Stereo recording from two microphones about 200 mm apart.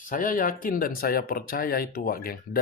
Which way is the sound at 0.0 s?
45° left (ahead or behind).